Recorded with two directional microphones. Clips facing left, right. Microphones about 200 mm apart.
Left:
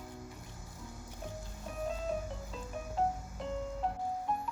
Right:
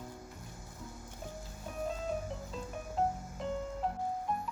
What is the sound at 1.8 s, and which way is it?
Music, centre (ahead or behind).